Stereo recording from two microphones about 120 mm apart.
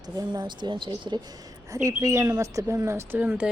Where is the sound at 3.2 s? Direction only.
10° right (ahead or behind).